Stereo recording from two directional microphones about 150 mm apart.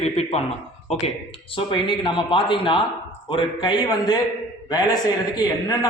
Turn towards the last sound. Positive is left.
turn(degrees=25)  # may be behind; listen again after turning